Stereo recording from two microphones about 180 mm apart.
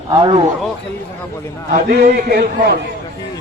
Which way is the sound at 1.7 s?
55° right (ahead or behind).